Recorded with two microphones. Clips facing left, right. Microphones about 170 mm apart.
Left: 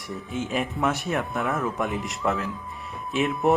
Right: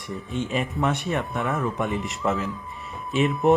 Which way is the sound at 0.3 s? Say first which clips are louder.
Right 1 dB; centre (ahead or behind).